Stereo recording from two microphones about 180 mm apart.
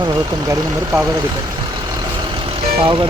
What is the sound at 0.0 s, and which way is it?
Speech, 20° right (ahead or behind).